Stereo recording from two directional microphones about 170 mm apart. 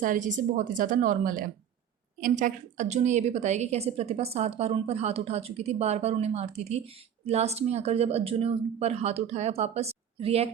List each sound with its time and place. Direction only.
0.0 s a woman's voice: 50° right (ahead or behind)